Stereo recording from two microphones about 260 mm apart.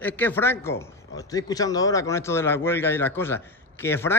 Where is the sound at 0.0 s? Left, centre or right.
Centre.